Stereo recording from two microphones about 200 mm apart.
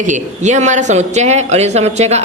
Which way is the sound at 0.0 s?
40° right (ahead or behind).